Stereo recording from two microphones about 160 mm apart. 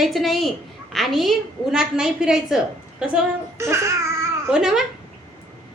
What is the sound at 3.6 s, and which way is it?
Speech, 15° right (ahead or behind).